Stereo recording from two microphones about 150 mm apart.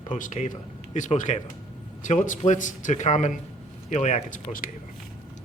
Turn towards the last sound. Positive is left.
turn(degrees=65)  # may be behind; listen again after turning